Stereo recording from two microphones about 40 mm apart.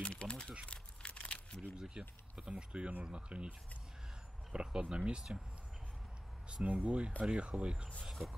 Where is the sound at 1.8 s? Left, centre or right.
Centre.